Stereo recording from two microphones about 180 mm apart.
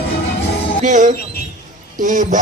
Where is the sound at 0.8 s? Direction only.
45° right (ahead or behind).